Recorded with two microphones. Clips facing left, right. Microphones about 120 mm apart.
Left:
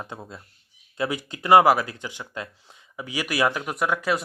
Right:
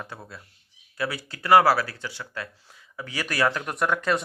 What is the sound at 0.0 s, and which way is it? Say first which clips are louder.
Speech: left 2 dB; 20° left (ahead or behind).